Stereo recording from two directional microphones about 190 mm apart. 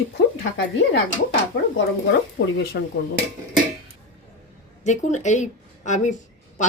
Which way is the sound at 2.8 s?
55° left (ahead or behind).